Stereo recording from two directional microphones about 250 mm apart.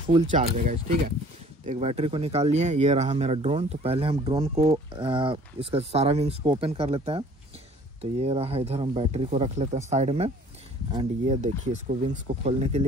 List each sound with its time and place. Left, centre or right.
0.1 s speech: right
0.7 s speech: right
1.7 s speech: right